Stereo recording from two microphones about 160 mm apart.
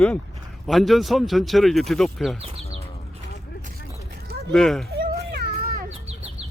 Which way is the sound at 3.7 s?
80° right.